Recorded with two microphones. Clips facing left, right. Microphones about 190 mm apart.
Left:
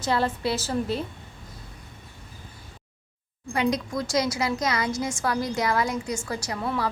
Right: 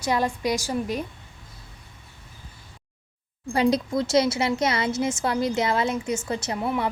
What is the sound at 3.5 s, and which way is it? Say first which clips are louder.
A woman's voice: right 4 dB; 30° right (ahead or behind).